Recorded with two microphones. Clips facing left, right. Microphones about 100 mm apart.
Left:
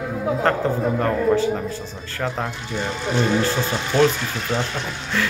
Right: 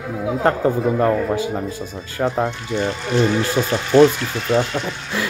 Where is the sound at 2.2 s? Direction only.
5° right (ahead or behind).